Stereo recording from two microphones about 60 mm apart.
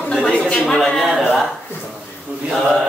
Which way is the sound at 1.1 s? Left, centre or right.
Centre.